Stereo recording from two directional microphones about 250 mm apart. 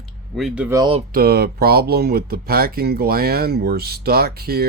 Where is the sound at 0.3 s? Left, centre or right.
Centre.